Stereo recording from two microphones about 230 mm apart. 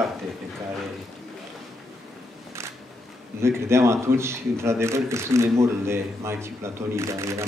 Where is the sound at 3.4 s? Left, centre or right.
Centre.